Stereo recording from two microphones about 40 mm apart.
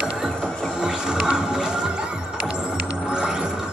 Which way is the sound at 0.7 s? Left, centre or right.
Centre.